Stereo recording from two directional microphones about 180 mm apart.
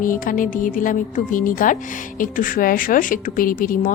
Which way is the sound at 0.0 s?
50° left (ahead or behind).